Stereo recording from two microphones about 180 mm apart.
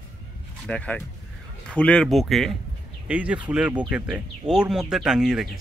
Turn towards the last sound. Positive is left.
turn(degrees=-5)  # may be behind; listen again after turning